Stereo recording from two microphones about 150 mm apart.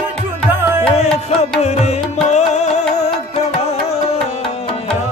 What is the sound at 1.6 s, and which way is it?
Music, 45° left (ahead or behind).